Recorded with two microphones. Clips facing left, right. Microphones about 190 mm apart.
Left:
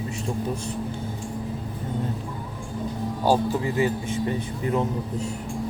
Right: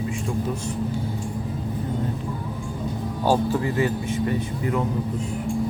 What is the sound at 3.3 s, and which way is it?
Speech, 15° left (ahead or behind).